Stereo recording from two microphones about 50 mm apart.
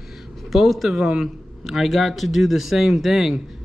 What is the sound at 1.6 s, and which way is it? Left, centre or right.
A man's voice, centre.